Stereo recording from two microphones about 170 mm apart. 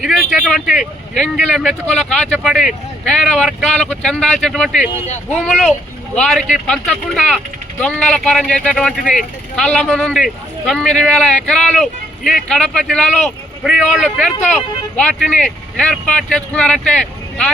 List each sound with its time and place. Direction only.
0.0 s speech: centre (ahead or behind)
5.0 s speech: 40° left (ahead or behind)
5.5 s speech: centre (ahead or behind)